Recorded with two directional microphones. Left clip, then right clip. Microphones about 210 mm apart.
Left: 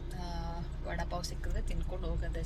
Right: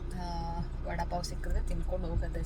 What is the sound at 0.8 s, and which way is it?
Speech, 5° right (ahead or behind).